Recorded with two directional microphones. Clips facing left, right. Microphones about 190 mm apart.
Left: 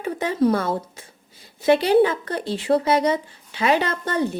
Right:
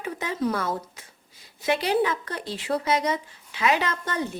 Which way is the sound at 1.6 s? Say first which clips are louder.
Left 7 dB; 30° left (ahead or behind).